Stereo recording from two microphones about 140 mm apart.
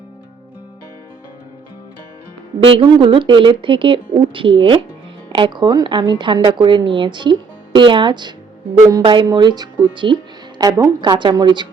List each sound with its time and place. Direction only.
2.7 s a woman's voice: 35° right (ahead or behind)